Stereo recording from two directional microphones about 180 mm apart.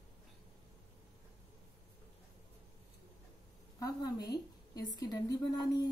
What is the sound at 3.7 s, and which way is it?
A woman's voice, 20° left (ahead or behind).